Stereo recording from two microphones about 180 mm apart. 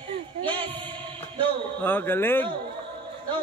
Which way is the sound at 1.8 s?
10° left (ahead or behind).